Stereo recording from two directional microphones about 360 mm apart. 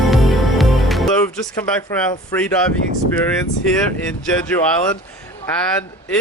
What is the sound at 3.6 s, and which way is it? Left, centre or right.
Speech, centre.